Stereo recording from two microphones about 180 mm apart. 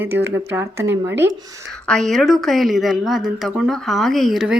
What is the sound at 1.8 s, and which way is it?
Speech, 5° left (ahead or behind).